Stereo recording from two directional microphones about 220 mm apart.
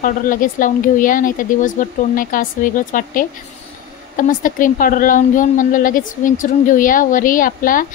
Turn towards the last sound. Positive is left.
turn(degrees=40)  # may be behind; listen again after turning